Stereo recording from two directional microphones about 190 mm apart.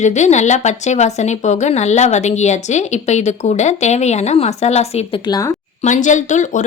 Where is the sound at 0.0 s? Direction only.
40° left (ahead or behind); by 5.5 s 20° left (ahead or behind).